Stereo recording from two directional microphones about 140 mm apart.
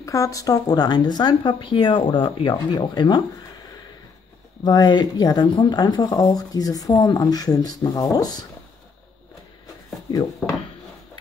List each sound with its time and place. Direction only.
0.0 s speech: 25° left (ahead or behind)
4.6 s speech: 30° left (ahead or behind)